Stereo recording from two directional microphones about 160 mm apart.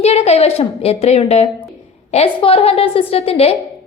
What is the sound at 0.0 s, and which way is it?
A woman's voice, 40° left (ahead or behind).